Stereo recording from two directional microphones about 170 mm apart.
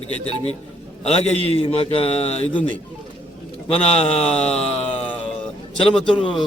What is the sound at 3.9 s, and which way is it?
A man's voice, 35° left (ahead or behind).